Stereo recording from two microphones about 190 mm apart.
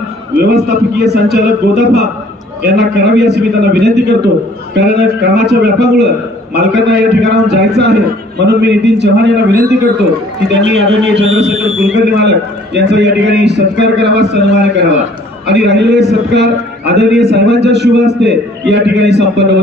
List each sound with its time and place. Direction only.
0.4 s a man's voice: 60° right (ahead or behind)
10.7 s a man's voice: 70° right (ahead or behind)